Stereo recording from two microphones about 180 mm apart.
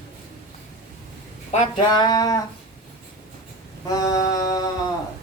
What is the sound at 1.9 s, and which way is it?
Speech, 20° left (ahead or behind).